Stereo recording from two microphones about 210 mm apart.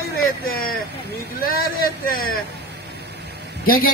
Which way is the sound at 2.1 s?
45° left (ahead or behind).